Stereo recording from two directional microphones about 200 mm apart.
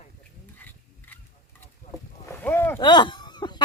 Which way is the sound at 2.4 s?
10° left (ahead or behind).